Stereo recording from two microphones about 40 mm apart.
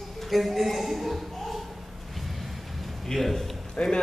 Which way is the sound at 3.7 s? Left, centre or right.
Left.